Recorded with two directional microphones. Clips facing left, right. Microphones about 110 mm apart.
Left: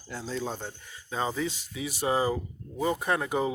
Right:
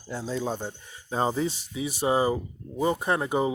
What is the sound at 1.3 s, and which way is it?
Speech, 30° right (ahead or behind).